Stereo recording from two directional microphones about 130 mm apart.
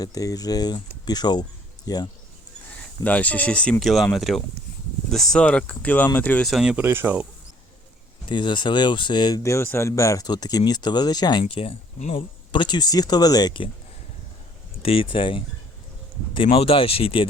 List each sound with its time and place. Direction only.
0.0 s speech: 30° left (ahead or behind)
3.0 s speech: 10° left (ahead or behind)
6.5 s speech: 5° right (ahead or behind)
6.8 s speech: 20° right (ahead or behind)
8.3 s speech: 35° left (ahead or behind); by 12.1 s 55° left (ahead or behind)
12.1 s speech: 40° left (ahead or behind)
14.8 s speech: 45° left (ahead or behind)